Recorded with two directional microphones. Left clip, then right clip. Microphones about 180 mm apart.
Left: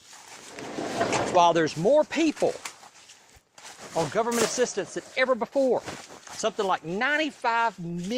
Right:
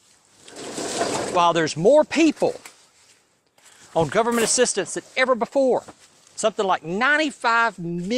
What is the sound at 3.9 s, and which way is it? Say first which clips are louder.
Speech: right 6 dB; 55° right (ahead or behind).